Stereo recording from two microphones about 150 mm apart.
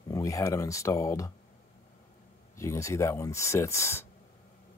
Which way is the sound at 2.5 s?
20° left (ahead or behind).